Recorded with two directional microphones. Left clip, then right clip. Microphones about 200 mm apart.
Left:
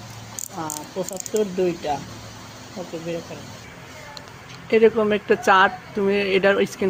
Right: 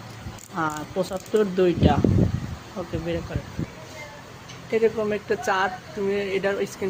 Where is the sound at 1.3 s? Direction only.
30° right (ahead or behind).